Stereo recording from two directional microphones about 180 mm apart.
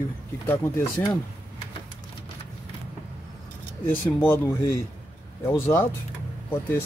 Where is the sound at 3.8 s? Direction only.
10° left (ahead or behind).